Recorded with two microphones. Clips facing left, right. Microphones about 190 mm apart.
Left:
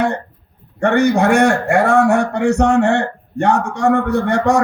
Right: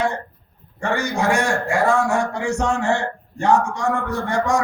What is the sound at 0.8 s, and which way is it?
A man's voice, 60° left (ahead or behind).